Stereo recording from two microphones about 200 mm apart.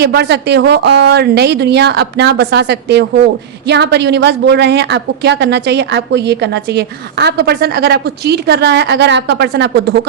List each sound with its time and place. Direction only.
0.0 s a woman's voice: 55° right (ahead or behind)